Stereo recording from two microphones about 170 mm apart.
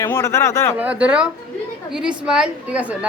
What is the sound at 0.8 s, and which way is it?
A woman's voice, 5° right (ahead or behind).